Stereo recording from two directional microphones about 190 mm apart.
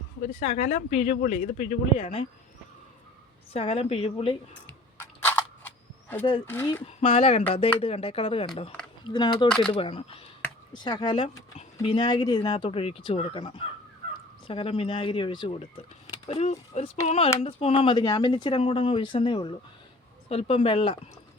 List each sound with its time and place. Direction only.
0.3 s speech: 35° left (ahead or behind)
3.5 s speech: 30° left (ahead or behind)
5.2 s cap gun: 10° left (ahead or behind)
6.4 s speech: 10° left (ahead or behind)
6.8 s speech: 30° left (ahead or behind)